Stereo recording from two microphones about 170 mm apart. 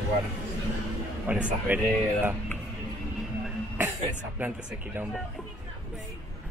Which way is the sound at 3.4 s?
10° right (ahead or behind).